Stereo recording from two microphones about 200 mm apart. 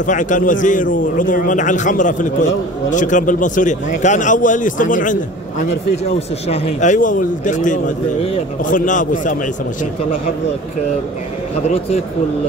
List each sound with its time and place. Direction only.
0.0 s a man's voice: 40° left (ahead or behind)